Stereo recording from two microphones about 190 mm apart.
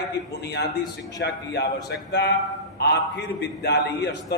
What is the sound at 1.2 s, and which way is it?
A man's voice, 60° left (ahead or behind).